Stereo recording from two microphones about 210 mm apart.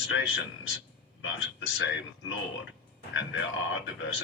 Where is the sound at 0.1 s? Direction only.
60° left (ahead or behind).